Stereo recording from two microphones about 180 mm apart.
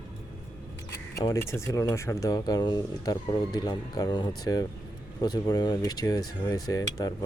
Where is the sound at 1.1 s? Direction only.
15° left (ahead or behind).